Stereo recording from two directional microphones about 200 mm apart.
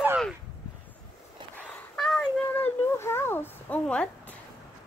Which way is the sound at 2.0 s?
5° left (ahead or behind).